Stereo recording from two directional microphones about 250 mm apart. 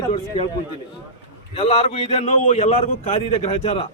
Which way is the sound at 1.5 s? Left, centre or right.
Left.